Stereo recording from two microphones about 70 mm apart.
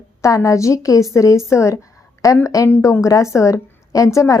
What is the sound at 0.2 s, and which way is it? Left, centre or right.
A woman's voice, left.